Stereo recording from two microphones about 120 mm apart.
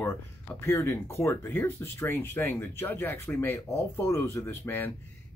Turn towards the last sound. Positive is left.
turn(degrees=20)  # may be behind; listen again after turning